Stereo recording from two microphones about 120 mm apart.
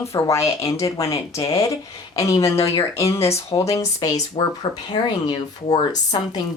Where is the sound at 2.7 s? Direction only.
25° left (ahead or behind).